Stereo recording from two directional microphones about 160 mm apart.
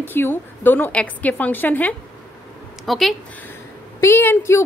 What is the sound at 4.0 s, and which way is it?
Speech, 15° left (ahead or behind).